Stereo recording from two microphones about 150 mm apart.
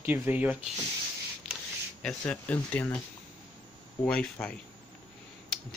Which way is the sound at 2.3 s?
10° left (ahead or behind).